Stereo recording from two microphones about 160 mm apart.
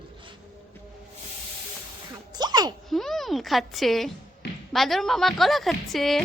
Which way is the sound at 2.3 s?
25° right (ahead or behind).